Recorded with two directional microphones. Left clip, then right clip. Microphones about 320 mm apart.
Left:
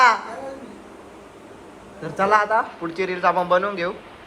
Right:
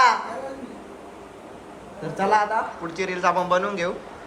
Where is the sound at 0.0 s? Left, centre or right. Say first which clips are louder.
Left 2 dB; centre.